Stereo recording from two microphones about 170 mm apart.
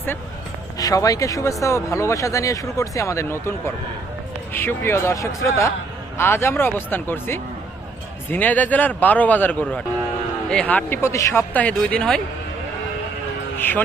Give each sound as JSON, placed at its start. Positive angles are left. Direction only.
{"t": 0.8, "sound": "speech", "side_deg": 20}
{"t": 4.5, "sound": "speech", "side_deg": 15}
{"t": 13.6, "sound": "music", "side_deg": 10}